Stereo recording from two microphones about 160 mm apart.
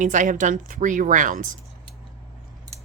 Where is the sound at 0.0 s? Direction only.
50° right (ahead or behind).